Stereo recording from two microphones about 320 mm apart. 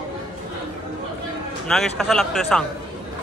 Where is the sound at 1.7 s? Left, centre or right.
Centre.